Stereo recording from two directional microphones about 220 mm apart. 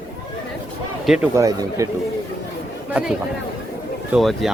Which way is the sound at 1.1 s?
10° right (ahead or behind).